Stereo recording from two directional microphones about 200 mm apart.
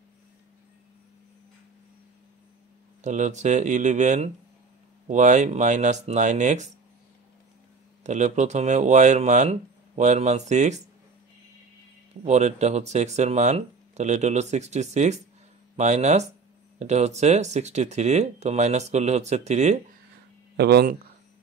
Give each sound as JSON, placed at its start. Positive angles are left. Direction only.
{"t": 3.0, "sound": "speech", "side_deg": -35}
{"t": 8.0, "sound": "speech", "side_deg": -35}
{"t": 12.3, "sound": "speech", "side_deg": -35}
{"t": 20.5, "sound": "speech", "side_deg": -55}